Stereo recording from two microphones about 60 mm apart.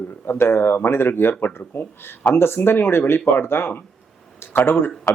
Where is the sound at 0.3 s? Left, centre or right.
Left.